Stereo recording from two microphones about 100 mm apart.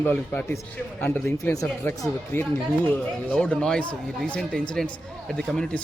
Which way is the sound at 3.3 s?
10° left (ahead or behind).